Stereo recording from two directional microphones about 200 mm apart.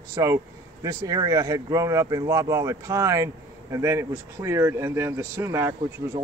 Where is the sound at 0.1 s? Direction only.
15° right (ahead or behind).